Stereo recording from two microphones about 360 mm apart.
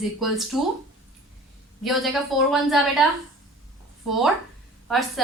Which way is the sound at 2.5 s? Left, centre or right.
Centre.